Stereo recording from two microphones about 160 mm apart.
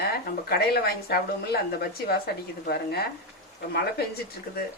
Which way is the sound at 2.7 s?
80° left.